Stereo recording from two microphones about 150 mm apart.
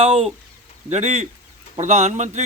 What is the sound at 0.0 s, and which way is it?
A man's voice, 40° right (ahead or behind).